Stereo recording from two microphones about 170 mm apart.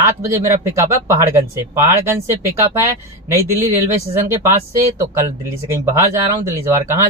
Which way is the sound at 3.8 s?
15° right (ahead or behind).